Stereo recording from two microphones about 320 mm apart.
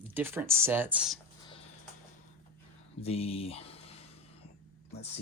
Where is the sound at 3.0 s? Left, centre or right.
Centre.